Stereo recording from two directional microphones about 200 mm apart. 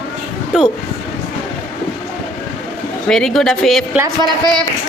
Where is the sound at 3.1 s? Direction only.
Centre (ahead or behind).